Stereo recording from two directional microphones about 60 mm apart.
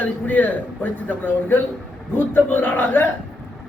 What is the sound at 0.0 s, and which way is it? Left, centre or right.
A man's voice, left.